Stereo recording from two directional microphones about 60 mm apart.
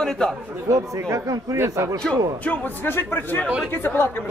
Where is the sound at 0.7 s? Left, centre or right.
Right.